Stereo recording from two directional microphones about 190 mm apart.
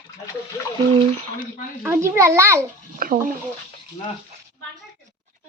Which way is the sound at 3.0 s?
50° right (ahead or behind).